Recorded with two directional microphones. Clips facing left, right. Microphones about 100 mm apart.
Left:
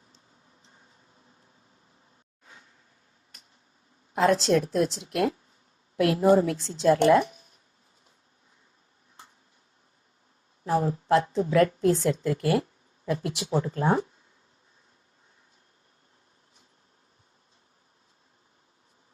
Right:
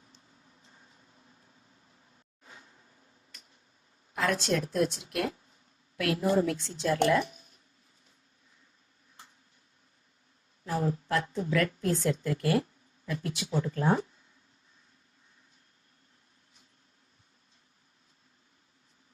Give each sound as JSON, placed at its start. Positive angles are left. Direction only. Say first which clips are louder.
{"t": 4.1, "sound": "a woman's voice", "louder": "left 7 dB", "side_deg": 30}
{"t": 10.6, "sound": "a woman's voice", "louder": "left 5 dB", "side_deg": 30}